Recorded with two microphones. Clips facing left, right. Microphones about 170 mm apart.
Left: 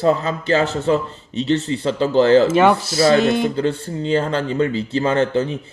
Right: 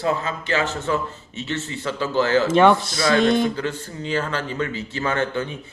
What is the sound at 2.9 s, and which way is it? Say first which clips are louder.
Speech: left 6 dB; 25° left (ahead or behind).